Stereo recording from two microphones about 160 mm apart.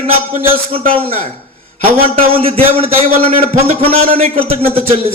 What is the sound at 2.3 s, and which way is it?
A man's voice, 35° right (ahead or behind).